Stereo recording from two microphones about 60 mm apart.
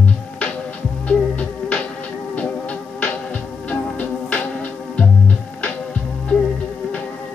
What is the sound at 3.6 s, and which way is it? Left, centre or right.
Music, left.